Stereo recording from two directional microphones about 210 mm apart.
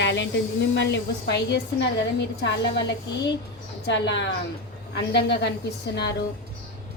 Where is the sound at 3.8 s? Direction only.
55° left (ahead or behind).